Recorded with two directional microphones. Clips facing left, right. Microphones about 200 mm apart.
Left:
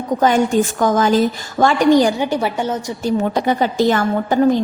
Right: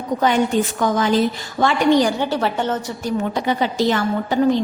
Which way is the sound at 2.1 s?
10° left (ahead or behind).